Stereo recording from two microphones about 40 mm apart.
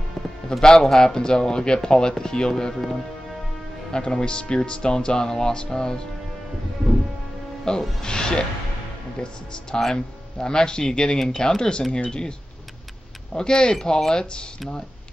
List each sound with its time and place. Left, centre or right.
0.5 s speech: centre
3.9 s speech: left
7.7 s speech: left
9.7 s speech: centre